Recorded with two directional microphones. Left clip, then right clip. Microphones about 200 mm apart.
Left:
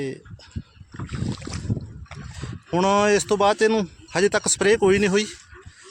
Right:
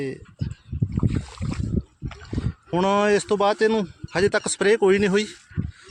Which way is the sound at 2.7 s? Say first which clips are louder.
Left 1 dB; centre (ahead or behind).